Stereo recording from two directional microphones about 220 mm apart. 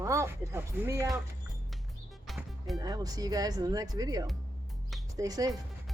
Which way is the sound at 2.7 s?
15° right (ahead or behind).